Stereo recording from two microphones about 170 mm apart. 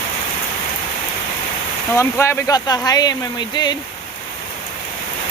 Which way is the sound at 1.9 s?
15° left (ahead or behind).